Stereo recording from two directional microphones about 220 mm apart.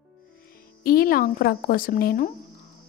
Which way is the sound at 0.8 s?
45° left (ahead or behind).